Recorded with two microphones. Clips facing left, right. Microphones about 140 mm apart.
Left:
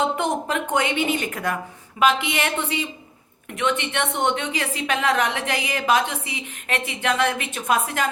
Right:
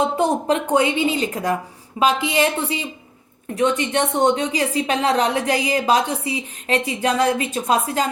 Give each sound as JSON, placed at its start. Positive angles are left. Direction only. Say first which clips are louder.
{"t": 0.0, "sound": "a woman's voice", "louder": "right 4 dB", "side_deg": -35}